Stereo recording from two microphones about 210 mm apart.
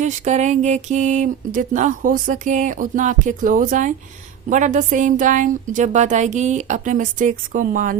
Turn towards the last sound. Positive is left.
turn(degrees=-40)  # may be behind; listen again after turning